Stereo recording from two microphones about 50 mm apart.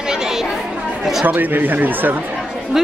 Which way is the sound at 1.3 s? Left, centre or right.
Right.